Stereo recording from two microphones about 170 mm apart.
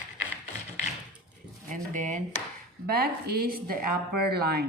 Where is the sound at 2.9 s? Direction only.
65° right (ahead or behind).